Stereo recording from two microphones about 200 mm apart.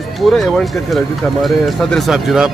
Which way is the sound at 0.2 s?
Centre (ahead or behind).